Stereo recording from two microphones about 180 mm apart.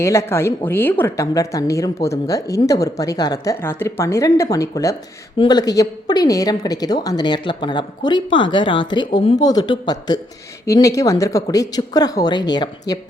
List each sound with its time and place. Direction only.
0.0 s a woman's voice: 15° left (ahead or behind)